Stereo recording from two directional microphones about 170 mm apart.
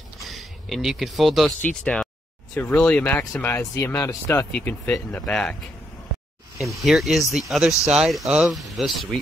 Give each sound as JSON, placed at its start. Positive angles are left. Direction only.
{"t": 0.2, "sound": "speech", "side_deg": 0}
{"t": 6.6, "sound": "speech", "side_deg": 0}